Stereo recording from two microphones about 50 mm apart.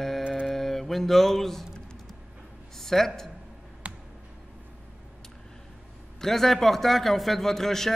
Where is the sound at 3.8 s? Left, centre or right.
Right.